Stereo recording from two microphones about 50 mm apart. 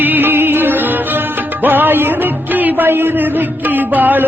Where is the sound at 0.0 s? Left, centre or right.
Right.